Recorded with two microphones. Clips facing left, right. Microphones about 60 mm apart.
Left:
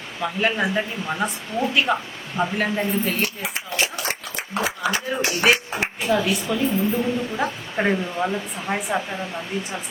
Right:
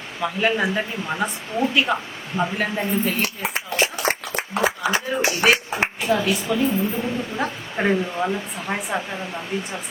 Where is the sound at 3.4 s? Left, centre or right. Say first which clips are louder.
Right 3 dB; right.